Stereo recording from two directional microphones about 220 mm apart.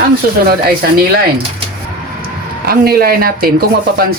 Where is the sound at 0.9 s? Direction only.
45° right (ahead or behind).